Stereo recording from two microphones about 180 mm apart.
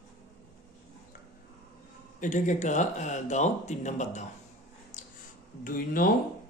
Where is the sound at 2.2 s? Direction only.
45° left (ahead or behind).